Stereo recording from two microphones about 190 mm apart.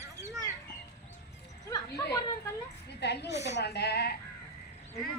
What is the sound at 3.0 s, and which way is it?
A woman's voice, 60° left (ahead or behind).